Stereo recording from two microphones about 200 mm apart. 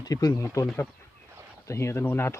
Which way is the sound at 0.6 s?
5° left (ahead or behind).